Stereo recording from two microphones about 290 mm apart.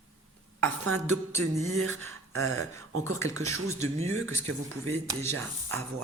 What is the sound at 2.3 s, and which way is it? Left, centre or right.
Speech, right.